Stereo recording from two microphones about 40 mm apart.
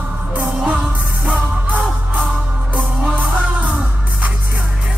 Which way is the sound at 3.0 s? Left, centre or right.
Right.